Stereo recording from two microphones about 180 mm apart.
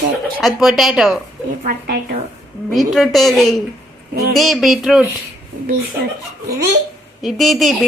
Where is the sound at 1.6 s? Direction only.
50° right (ahead or behind).